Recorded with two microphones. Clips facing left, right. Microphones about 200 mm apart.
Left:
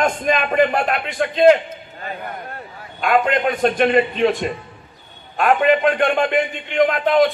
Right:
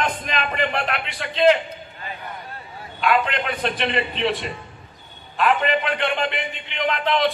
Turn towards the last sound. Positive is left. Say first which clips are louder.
# left 6 dB
turn(degrees=50)  # may be behind; listen again after turning